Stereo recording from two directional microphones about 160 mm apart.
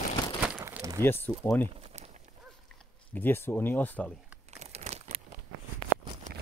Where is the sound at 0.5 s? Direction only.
10° right (ahead or behind).